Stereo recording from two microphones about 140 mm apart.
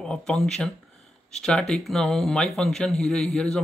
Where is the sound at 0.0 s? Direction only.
5° left (ahead or behind).